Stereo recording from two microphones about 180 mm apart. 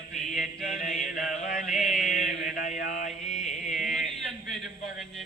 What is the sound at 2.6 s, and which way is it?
Mantra, 45° left (ahead or behind).